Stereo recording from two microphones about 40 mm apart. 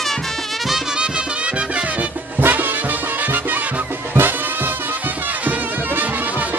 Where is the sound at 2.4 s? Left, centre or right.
Right.